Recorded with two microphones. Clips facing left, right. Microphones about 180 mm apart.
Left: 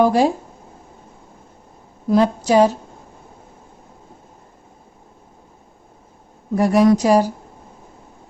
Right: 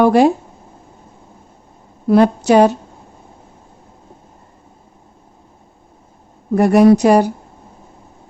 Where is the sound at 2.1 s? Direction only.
65° right (ahead or behind).